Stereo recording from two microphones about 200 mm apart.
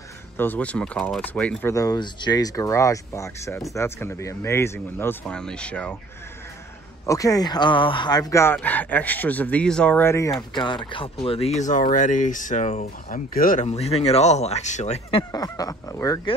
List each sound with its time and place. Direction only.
0.4 s speech: 10° left (ahead or behind)
7.1 s speech: 15° left (ahead or behind)